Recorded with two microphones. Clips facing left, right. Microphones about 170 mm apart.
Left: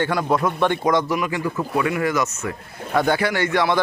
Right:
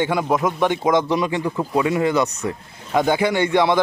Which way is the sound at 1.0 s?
25° right (ahead or behind).